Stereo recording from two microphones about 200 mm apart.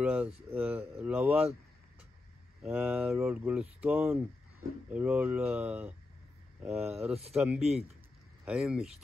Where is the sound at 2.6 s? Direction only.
5° right (ahead or behind).